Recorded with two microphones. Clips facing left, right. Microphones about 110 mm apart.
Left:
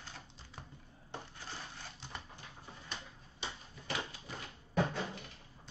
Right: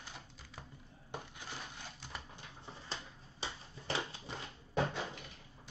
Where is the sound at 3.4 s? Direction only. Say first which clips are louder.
Right 1 dB; 30° right (ahead or behind).